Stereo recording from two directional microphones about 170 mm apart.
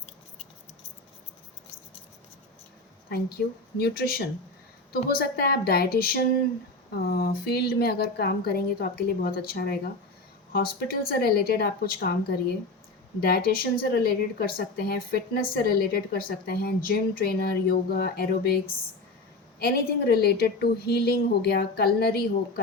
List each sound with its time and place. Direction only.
3.8 s a woman's voice: 65° left (ahead or behind)
13.2 s a woman's voice: 60° left (ahead or behind)